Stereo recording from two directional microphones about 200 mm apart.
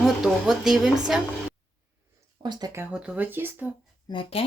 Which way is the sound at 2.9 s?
5° right (ahead or behind).